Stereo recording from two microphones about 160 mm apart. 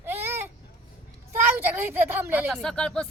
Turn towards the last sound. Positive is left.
turn(degrees=5)  # may be behind; listen again after turning